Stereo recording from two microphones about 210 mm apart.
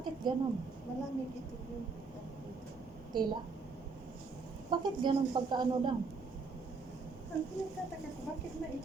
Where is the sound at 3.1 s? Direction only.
20° right (ahead or behind).